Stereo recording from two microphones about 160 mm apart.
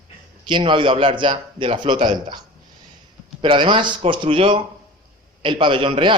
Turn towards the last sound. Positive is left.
turn(degrees=-30)  # may be behind; listen again after turning